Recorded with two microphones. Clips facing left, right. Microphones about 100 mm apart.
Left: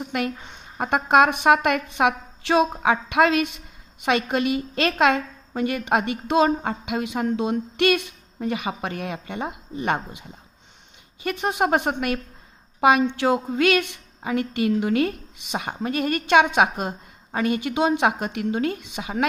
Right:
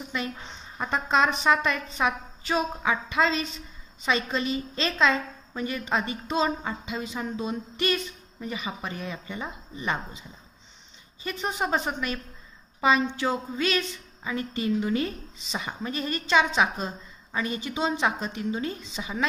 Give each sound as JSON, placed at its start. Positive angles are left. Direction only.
{"t": 0.0, "sound": "a woman's voice", "side_deg": 65}